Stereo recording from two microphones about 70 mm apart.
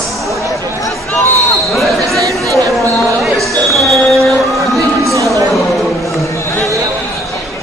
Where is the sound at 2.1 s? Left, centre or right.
Right.